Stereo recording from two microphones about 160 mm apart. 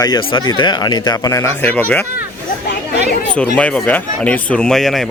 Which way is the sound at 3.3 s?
5° left (ahead or behind).